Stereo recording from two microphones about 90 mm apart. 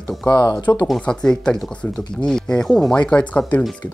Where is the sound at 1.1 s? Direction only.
10° left (ahead or behind).